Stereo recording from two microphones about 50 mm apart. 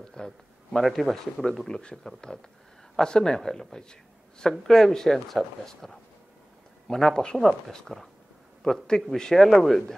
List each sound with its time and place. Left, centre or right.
0.0 s a sound: centre
0.8 s speech: centre
1.7 s speech: centre